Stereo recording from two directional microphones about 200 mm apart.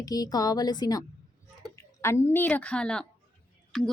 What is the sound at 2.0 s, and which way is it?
A woman's voice, 15° left (ahead or behind).